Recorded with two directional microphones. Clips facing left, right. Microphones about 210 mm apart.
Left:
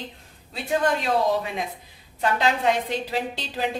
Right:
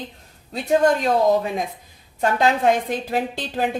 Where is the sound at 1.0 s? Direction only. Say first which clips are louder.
Right 5 dB; 45° right (ahead or behind).